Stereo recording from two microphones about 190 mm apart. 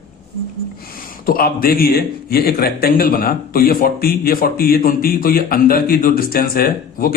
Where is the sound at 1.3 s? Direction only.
50° left (ahead or behind).